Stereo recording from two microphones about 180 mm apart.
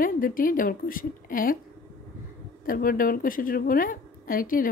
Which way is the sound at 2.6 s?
50° left (ahead or behind).